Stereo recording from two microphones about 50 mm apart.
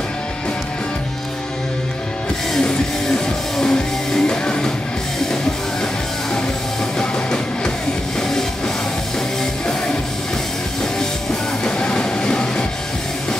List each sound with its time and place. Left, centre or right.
2.5 s music: centre
7.0 s music: centre
11.6 s train: centre